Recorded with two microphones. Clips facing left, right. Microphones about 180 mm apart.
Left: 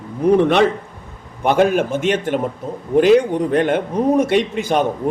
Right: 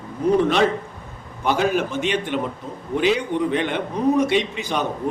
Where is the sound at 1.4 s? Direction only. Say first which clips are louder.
Left 5 dB; 55° left (ahead or behind).